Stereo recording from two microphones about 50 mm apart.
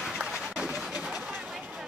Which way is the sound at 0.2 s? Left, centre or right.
Centre.